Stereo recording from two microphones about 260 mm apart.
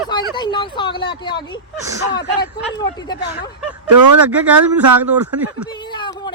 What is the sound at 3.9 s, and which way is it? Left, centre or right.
Speech, right.